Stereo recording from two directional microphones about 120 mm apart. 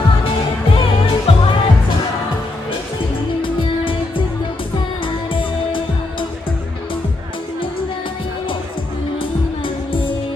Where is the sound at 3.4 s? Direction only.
45° left (ahead or behind).